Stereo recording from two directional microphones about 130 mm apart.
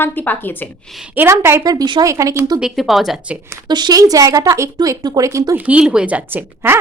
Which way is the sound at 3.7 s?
30° right (ahead or behind).